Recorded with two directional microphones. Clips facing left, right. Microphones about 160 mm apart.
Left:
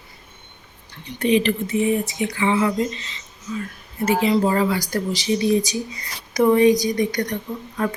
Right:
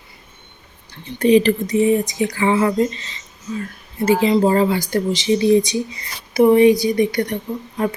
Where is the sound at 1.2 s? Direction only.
40° right (ahead or behind); by 5.3 s 25° right (ahead or behind).